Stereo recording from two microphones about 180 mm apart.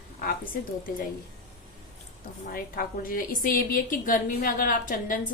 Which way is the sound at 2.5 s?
50° left (ahead or behind).